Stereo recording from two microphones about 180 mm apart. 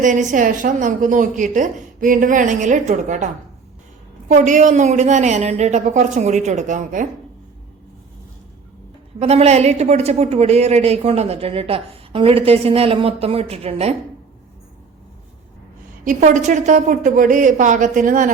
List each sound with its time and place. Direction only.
0.0 s a woman's voice: 45° right (ahead or behind)
4.3 s a woman's voice: 45° right (ahead or behind)
9.2 s a woman's voice: 35° right (ahead or behind)
16.0 s a woman's voice: 45° right (ahead or behind)